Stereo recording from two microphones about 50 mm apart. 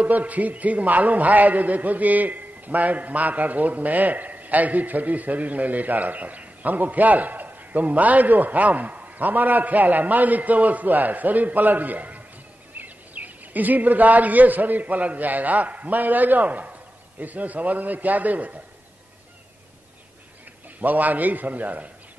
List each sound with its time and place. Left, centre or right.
0.0 s a man's voice: right
20.8 s a man's voice: right